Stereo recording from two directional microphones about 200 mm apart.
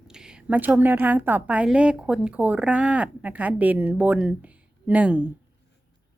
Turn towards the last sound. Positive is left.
turn(degrees=-10)  # may be behind; listen again after turning